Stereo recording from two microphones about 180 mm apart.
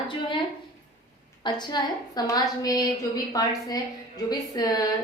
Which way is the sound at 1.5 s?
25° left (ahead or behind).